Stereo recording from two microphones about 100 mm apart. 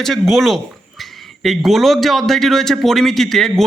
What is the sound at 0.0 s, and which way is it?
A man's voice, centre (ahead or behind).